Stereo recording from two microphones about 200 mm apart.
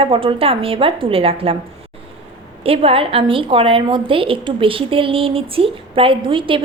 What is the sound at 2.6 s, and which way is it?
A woman's voice, 30° right (ahead or behind).